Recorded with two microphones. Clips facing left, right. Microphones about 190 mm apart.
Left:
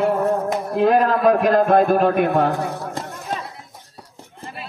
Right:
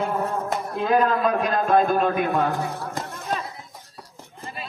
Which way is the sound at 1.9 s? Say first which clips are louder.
Left 5 dB; 60° left (ahead or behind).